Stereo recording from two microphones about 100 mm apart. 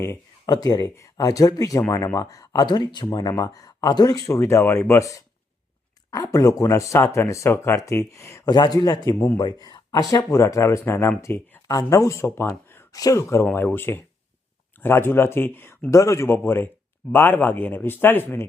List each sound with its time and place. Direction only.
0.4 s speech: 40° left (ahead or behind)
4.4 s speech: 25° left (ahead or behind)
8.4 s speech: 45° left (ahead or behind); by 11.6 s 20° left (ahead or behind)
11.7 s speech: 35° left (ahead or behind)
12.9 s speech: 35° left (ahead or behind)